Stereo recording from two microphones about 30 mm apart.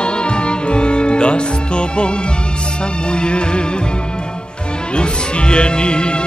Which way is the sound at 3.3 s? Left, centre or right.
Left.